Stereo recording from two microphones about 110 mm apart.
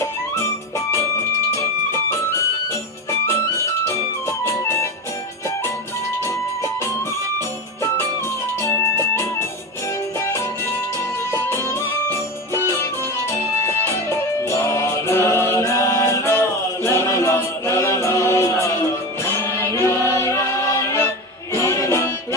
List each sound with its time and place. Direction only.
1.5 s music: 25° left (ahead or behind)
3.8 s music: 25° left (ahead or behind)
8.6 s music: 25° left (ahead or behind)
11.3 s music: 25° left (ahead or behind)